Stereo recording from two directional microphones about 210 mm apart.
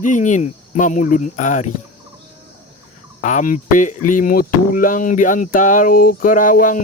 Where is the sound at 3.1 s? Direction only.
35° left (ahead or behind).